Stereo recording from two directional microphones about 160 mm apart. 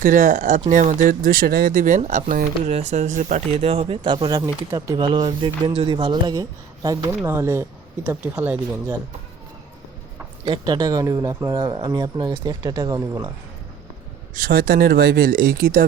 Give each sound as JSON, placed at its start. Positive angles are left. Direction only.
{"t": 0.0, "sound": "speech", "side_deg": -55}
{"t": 10.4, "sound": "speech", "side_deg": -30}
{"t": 14.3, "sound": "speech", "side_deg": -70}